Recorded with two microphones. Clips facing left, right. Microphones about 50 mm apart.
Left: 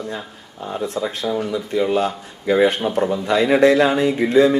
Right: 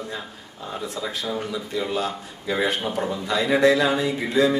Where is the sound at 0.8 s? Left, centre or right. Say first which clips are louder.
Left 7 dB; left.